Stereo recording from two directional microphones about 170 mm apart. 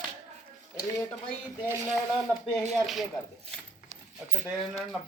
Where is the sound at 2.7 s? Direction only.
Centre (ahead or behind).